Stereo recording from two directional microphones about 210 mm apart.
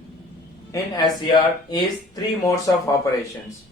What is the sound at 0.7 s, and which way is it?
Speech, 20° left (ahead or behind).